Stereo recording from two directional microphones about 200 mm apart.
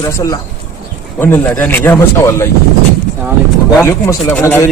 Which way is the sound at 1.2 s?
10° left (ahead or behind).